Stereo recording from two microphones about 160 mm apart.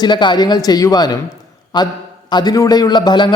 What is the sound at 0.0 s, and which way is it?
A man's voice, 30° left (ahead or behind).